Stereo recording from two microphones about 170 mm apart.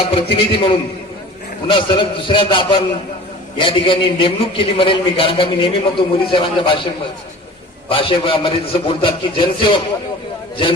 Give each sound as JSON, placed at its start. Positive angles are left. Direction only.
{"t": 0.1, "sound": "a man's voice", "side_deg": 30}
{"t": 7.9, "sound": "a man's voice", "side_deg": 30}